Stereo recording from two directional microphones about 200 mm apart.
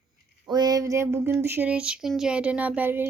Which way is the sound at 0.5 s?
20° right (ahead or behind).